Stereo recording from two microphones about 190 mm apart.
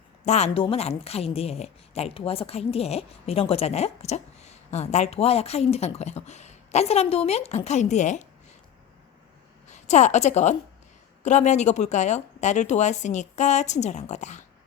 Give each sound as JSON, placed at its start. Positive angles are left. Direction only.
{"t": 0.3, "sound": "a woman's voice", "side_deg": 35}
{"t": 9.6, "sound": "a woman's voice", "side_deg": 40}